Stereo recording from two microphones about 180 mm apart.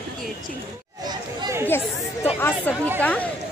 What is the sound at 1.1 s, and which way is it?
Speech, 20° right (ahead or behind).